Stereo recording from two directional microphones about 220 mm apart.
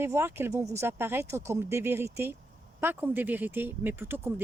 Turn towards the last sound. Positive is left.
turn(degrees=-10)  # may be behind; listen again after turning